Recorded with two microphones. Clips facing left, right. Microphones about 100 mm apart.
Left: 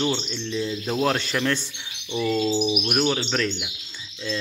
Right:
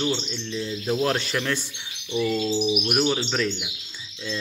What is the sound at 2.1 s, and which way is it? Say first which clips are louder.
Bird: left 1 dB; 25° left (ahead or behind).